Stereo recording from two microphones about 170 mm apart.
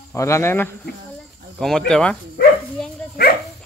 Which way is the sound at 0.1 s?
15° left (ahead or behind).